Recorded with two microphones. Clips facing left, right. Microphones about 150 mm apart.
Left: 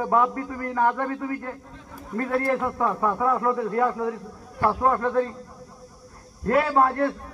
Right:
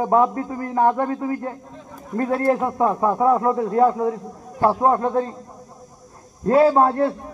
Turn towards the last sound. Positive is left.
turn(degrees=-25)  # may be behind; listen again after turning